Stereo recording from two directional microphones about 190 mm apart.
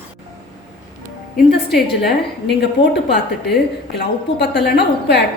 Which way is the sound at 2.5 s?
60° left (ahead or behind).